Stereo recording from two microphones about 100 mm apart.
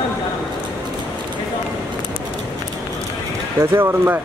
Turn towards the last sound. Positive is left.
turn(degrees=-25)  # may be behind; listen again after turning